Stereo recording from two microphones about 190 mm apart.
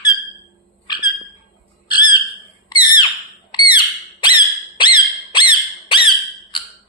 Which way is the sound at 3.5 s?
25° left (ahead or behind).